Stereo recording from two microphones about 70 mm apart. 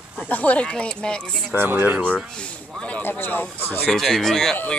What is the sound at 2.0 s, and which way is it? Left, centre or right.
Speech, centre.